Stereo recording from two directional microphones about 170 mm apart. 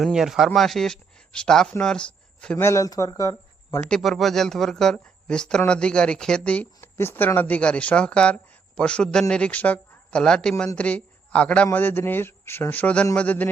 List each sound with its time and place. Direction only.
0.0 s speech: centre (ahead or behind); by 3.8 s 15° left (ahead or behind)
3.8 s a man's voice: 5° left (ahead or behind)